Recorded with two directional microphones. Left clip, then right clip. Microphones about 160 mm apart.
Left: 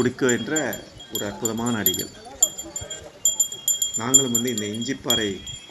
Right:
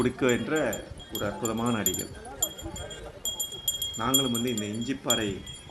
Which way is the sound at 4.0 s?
10° left (ahead or behind).